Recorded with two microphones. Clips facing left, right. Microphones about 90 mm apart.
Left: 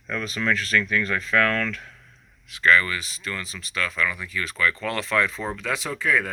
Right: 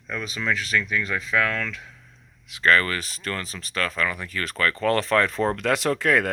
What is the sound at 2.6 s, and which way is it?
Speech, 45° right (ahead or behind).